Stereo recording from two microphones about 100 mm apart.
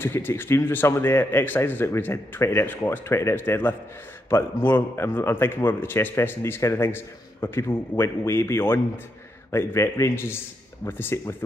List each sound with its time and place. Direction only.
0.0 s a man's voice: 25° left (ahead or behind)